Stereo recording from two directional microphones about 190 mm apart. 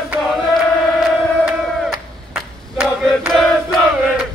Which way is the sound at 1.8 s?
5° right (ahead or behind).